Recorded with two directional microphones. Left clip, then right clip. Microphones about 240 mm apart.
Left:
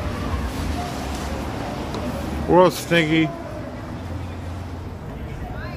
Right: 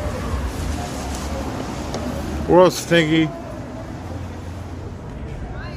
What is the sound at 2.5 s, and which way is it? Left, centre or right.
Speech, centre.